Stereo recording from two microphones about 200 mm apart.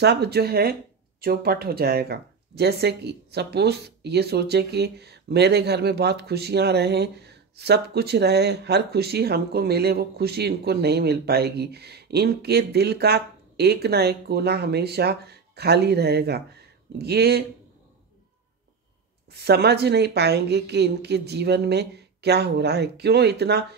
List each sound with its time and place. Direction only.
0.0 s speech: 55° right (ahead or behind)
19.3 s a woman's voice: 55° right (ahead or behind)